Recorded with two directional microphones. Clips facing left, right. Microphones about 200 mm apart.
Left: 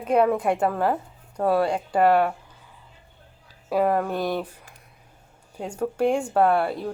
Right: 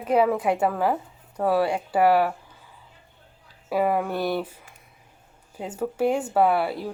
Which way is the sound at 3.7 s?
5° right (ahead or behind).